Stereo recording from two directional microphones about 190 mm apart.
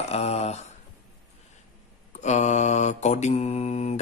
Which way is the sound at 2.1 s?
40° left (ahead or behind).